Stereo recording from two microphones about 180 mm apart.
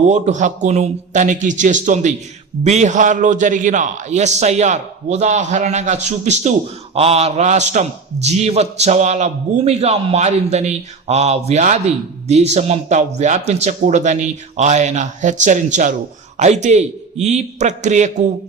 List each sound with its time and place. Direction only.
0.1 s a man's voice: 40° right (ahead or behind)